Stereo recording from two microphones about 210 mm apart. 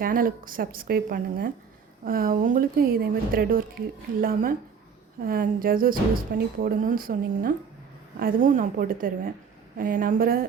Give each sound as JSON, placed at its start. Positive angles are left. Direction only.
{"t": 0.0, "sound": "a woman's voice", "side_deg": -40}